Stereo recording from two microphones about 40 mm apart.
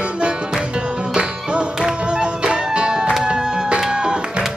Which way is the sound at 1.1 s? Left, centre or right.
Right.